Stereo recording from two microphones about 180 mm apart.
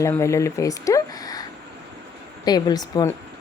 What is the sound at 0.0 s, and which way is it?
A woman's voice, 15° left (ahead or behind).